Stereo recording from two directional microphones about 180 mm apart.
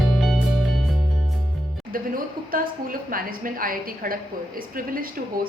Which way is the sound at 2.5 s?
50° right (ahead or behind).